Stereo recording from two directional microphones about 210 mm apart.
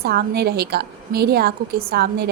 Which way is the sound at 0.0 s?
50° right (ahead or behind).